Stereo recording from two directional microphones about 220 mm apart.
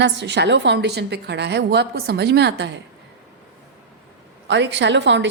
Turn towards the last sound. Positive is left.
turn(degrees=-55)  # may be behind; listen again after turning